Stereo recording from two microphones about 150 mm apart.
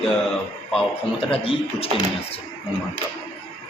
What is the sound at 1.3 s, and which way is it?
Speech, 40° left (ahead or behind).